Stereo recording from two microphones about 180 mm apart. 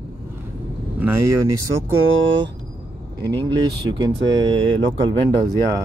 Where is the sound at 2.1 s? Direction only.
90° right.